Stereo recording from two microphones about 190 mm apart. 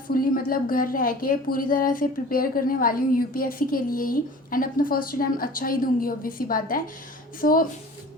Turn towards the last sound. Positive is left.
turn(degrees=50)  # may be behind; listen again after turning